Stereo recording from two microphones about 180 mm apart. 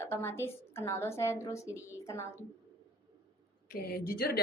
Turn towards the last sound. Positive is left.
turn(degrees=55)  # may be behind; listen again after turning